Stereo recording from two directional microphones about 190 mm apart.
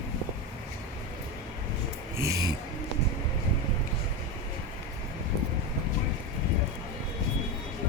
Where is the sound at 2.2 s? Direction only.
15° right (ahead or behind).